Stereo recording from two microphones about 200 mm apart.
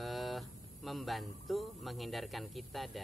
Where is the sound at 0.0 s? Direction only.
Centre (ahead or behind).